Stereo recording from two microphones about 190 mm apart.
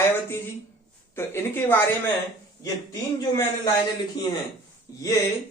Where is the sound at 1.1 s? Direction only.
10° left (ahead or behind).